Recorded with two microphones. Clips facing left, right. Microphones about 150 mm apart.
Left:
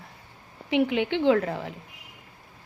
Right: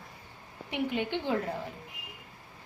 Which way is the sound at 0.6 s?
90° left.